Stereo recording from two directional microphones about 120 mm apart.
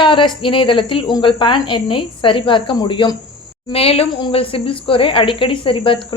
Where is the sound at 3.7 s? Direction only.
55° left (ahead or behind).